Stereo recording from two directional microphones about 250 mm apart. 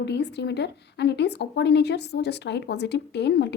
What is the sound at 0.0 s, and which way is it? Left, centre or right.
Speech, left.